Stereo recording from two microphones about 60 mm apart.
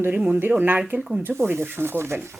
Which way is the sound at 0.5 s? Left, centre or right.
Right.